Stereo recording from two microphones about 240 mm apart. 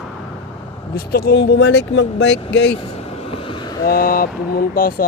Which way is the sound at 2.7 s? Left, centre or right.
Left.